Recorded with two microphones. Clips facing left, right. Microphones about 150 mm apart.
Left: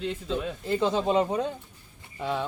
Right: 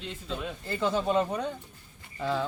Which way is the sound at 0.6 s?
20° left (ahead or behind).